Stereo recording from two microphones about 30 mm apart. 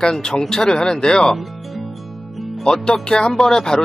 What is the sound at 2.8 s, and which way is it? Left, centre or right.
Speech, left.